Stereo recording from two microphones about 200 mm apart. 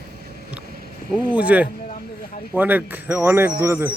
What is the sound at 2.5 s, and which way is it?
A man's voice, 10° right (ahead or behind).